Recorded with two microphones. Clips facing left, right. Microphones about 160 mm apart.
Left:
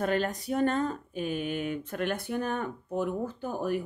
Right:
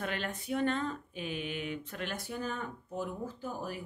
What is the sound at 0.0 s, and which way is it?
Speech, 40° left (ahead or behind).